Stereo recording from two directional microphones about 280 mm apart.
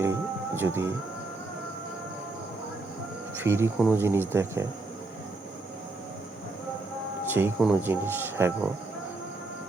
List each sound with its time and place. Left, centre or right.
0.0 s music: centre
3.3 s speech: centre
7.3 s speech: centre